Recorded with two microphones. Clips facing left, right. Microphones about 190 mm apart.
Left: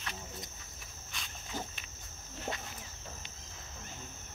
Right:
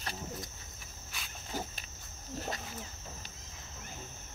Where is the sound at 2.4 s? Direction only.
40° right (ahead or behind).